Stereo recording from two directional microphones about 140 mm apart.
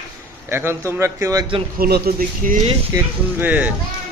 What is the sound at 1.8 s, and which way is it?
Speech, 90° right.